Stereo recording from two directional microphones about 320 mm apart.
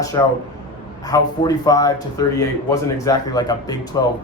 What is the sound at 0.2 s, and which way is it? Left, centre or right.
Speech, centre.